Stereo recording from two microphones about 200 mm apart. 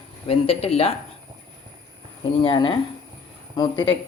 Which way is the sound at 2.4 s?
25° left (ahead or behind).